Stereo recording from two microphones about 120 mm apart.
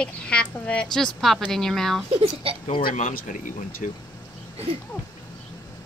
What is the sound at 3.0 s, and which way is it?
Speech, 90° left.